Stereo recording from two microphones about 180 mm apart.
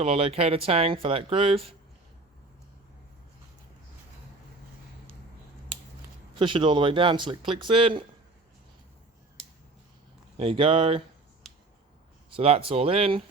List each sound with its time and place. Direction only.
0.0 s speech: 35° right (ahead or behind)
6.4 s speech: 25° right (ahead or behind)
10.3 s speech: 30° right (ahead or behind)
11.4 s a sound: centre (ahead or behind)
12.3 s speech: 30° right (ahead or behind)